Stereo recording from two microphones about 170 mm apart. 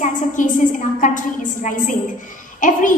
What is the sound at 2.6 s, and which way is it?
Speech, 50° left (ahead or behind).